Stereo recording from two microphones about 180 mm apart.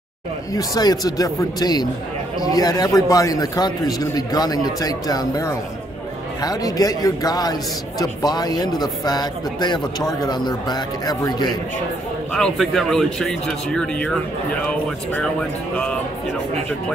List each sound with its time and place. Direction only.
0.5 s speech: 20° left (ahead or behind)
12.4 s speech: centre (ahead or behind)
15.7 s speech: 5° left (ahead or behind)